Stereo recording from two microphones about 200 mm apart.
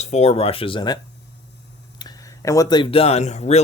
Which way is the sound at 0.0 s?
35° left (ahead or behind).